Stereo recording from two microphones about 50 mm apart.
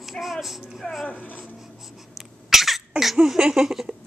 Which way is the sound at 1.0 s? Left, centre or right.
Left.